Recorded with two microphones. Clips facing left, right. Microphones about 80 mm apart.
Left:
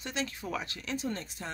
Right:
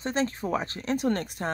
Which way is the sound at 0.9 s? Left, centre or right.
Right.